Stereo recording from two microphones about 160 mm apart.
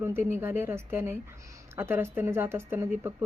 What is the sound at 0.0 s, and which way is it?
Speech, 15° right (ahead or behind).